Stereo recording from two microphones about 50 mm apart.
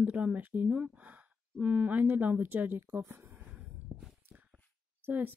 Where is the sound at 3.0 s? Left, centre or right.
Right.